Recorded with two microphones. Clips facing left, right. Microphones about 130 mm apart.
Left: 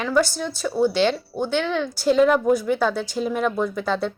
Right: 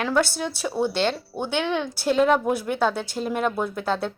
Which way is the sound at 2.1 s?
Centre (ahead or behind).